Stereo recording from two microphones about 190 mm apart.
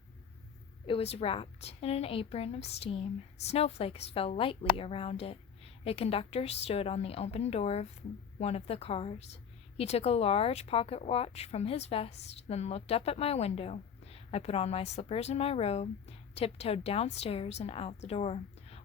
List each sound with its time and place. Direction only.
0.9 s a woman's voice: 30° left (ahead or behind)